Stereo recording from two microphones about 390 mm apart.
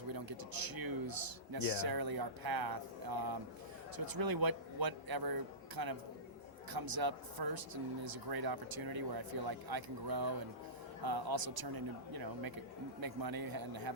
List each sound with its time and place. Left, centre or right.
0.1 s a man's voice: right